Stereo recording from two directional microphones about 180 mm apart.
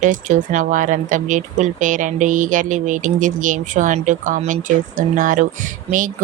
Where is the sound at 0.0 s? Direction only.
45° right (ahead or behind).